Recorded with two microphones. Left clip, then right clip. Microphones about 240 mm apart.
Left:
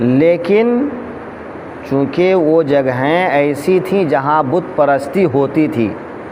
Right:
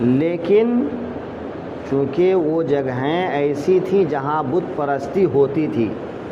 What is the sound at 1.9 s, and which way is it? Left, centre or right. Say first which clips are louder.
Speech: left 4 dB; left.